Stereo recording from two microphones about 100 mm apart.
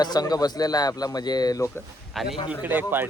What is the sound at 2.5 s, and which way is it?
Speech, 15° right (ahead or behind).